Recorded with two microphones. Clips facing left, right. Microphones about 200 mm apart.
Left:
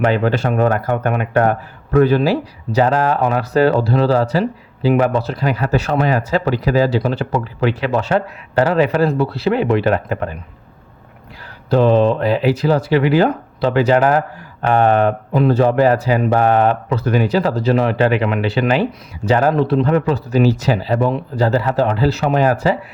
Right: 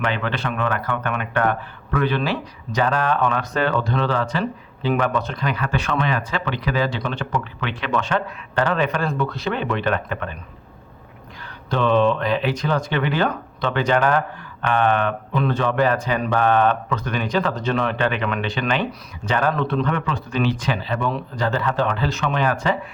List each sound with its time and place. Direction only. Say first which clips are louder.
0.1 s speech: left 8 dB; 40° left (ahead or behind)
11.7 s speech: left 5 dB; 35° left (ahead or behind)